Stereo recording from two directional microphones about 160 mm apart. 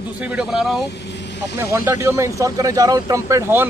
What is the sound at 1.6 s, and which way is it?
Speech, 15° right (ahead or behind).